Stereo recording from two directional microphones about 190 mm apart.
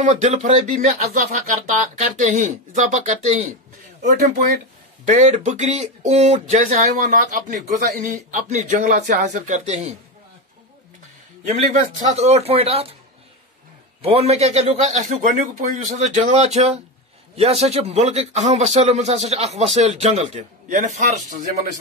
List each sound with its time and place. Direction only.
0.0 s speech: 40° right (ahead or behind)
11.5 s speech: 40° right (ahead or behind)
14.0 s speech: 30° right (ahead or behind)